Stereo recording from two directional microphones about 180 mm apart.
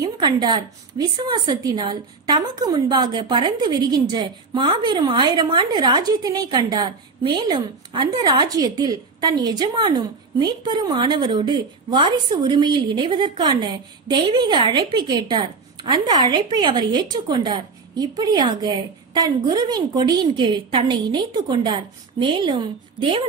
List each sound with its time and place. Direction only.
0.0 s a woman's voice: 25° right (ahead or behind)